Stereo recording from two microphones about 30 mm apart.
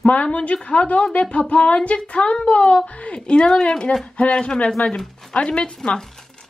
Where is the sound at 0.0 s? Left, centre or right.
Left.